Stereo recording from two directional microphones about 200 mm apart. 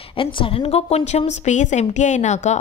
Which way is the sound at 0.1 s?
25° left (ahead or behind).